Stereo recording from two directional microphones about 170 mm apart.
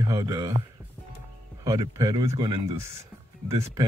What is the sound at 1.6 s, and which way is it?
Speech, 20° right (ahead or behind).